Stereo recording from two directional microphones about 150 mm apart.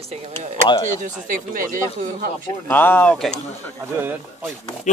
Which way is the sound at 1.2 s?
65° right (ahead or behind).